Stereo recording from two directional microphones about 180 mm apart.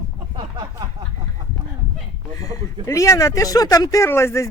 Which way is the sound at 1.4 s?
20° right (ahead or behind).